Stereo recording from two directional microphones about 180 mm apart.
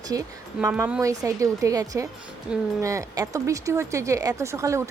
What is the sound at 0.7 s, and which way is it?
Speech, 5° right (ahead or behind).